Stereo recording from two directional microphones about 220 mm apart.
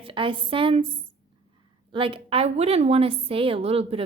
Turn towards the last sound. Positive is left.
turn(degrees=-25)  # may be behind; listen again after turning